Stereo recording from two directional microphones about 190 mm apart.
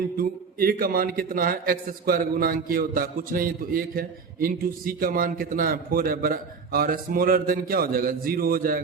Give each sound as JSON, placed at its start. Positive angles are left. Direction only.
{"t": 0.2, "sound": "a man's voice", "side_deg": -50}